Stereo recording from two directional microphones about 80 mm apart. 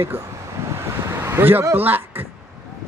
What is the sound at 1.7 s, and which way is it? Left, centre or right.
Speech, right.